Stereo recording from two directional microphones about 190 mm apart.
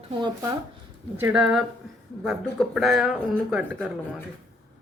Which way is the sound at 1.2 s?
5° right (ahead or behind).